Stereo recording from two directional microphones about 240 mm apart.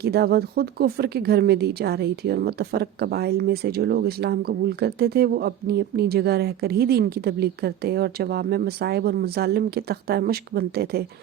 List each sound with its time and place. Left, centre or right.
0.0 s speech: right